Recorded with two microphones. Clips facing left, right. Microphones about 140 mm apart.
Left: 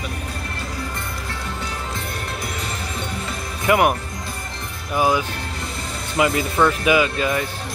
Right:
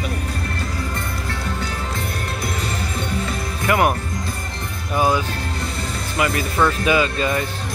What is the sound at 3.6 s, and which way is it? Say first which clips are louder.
Speech: left 1 dB; 15° left (ahead or behind).